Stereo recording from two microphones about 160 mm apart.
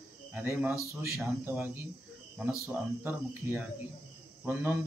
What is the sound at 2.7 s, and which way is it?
Speech, 15° right (ahead or behind).